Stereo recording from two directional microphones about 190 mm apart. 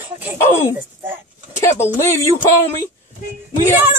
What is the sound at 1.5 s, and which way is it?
Speech, 15° left (ahead or behind).